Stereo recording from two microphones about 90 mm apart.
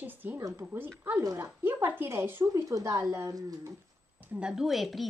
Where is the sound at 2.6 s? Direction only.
40° right (ahead or behind).